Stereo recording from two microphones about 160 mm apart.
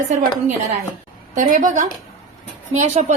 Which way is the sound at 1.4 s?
55° right (ahead or behind).